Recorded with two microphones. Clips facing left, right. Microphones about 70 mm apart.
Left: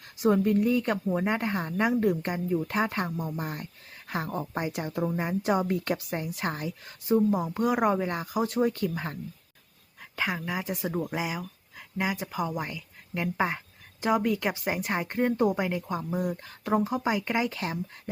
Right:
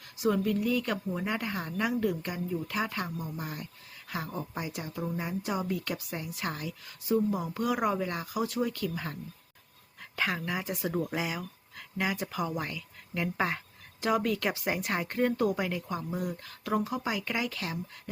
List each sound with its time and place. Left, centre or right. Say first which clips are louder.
0.2 s a woman's voice: left 5 dB; left
10.0 s speech: left 1 dB; centre; by 18.1 s left